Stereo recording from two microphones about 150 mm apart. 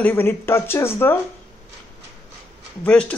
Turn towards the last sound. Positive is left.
turn(degrees=10)  # may be behind; listen again after turning